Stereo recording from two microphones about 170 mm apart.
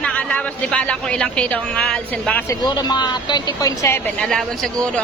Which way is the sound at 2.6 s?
25° left (ahead or behind).